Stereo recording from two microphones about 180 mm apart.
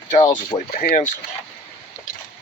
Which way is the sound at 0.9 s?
45° left (ahead or behind).